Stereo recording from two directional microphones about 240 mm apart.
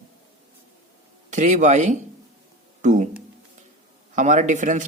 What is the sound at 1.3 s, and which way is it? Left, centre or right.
Speech, right.